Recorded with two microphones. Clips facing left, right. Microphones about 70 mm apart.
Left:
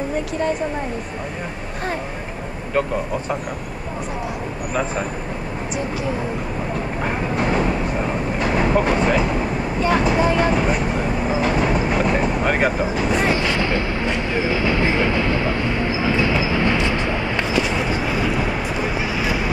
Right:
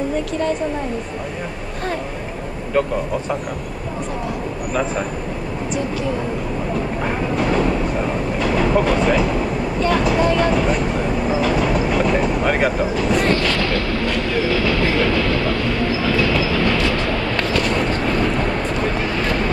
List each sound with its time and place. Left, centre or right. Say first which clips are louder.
7.2 s speech: right 2 dB; centre
13.4 s train: right 1 dB; centre